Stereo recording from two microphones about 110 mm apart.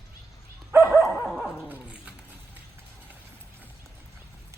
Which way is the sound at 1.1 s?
5° right (ahead or behind).